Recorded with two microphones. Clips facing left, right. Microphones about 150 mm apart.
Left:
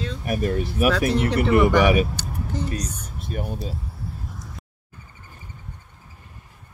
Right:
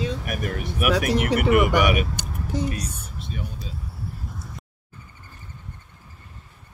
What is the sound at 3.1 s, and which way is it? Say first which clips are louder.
Speech: left 8 dB; 55° left (ahead or behind).